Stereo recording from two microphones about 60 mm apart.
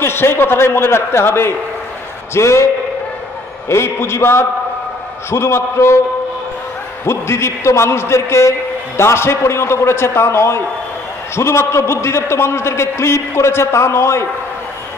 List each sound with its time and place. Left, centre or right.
0.0 s a man's voice: left
3.6 s a man's voice: left
7.1 s a man's voice: left